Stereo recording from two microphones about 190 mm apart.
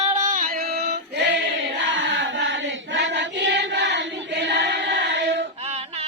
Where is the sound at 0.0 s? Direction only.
40° right (ahead or behind); by 1.2 s 55° right (ahead or behind).